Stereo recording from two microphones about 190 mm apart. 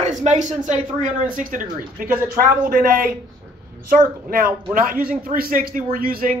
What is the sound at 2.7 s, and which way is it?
Speech, 50° right (ahead or behind).